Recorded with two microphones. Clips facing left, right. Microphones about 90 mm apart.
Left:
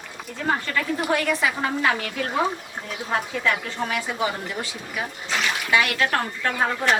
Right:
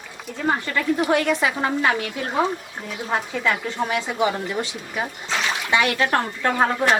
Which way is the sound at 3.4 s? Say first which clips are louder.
Right 2 dB; 20° right (ahead or behind).